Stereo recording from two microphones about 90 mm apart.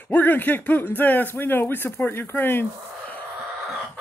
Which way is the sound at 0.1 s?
20° left (ahead or behind).